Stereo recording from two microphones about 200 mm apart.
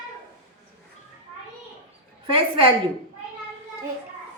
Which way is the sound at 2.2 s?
25° right (ahead or behind).